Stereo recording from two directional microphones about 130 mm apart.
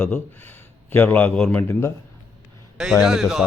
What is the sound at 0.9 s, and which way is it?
Speech, 10° left (ahead or behind).